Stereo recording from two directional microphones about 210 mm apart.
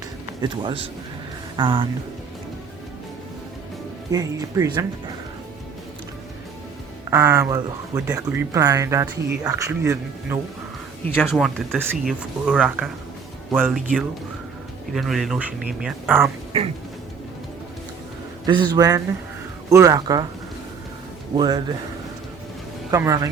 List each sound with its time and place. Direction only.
0.4 s a man's voice: 20° right (ahead or behind)
4.1 s speech: 15° right (ahead or behind)
7.1 s speech: 15° right (ahead or behind)
11.3 s speech: centre (ahead or behind)
18.4 s a man's voice: 20° right (ahead or behind)
21.3 s a man's voice: 20° right (ahead or behind)
22.9 s speech: 15° right (ahead or behind)